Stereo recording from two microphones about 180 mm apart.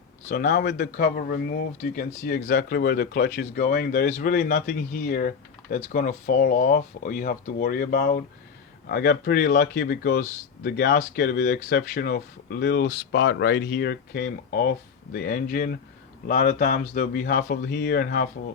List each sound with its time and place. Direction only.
0.3 s speech: 65° left (ahead or behind)
1.8 s speech: 50° left (ahead or behind)